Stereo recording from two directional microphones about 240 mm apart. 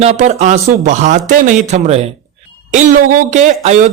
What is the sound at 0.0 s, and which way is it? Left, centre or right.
Speech, right.